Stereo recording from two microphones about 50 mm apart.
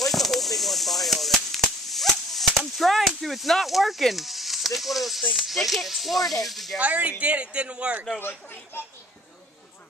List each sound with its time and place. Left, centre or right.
0.0 s firecracker: centre
6.8 s a man's voice: right
8.2 s speech: left